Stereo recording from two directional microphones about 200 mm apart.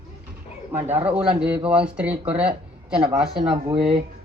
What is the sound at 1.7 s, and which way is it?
Child singing, 5° right (ahead or behind).